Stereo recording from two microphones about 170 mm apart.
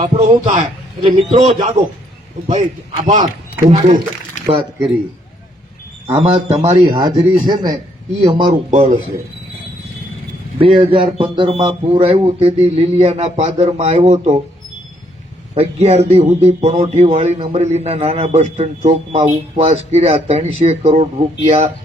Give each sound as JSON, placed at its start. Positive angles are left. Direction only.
{"t": 0.0, "sound": "a man's voice", "side_deg": -30}
{"t": 4.4, "sound": "speech", "side_deg": -30}
{"t": 6.1, "sound": "speech", "side_deg": -35}
{"t": 8.7, "sound": "a man's voice", "side_deg": -45}
{"t": 10.6, "sound": "speech", "side_deg": -30}
{"t": 15.5, "sound": "speech", "side_deg": -40}